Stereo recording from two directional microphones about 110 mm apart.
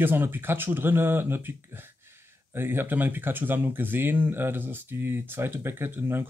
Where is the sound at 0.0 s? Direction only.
20° right (ahead or behind).